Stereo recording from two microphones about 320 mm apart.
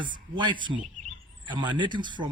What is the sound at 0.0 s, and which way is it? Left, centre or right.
A man's voice, centre.